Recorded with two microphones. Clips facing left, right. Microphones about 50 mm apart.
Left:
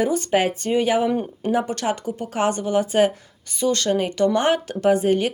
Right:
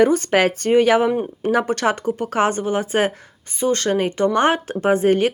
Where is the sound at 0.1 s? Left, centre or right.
Right.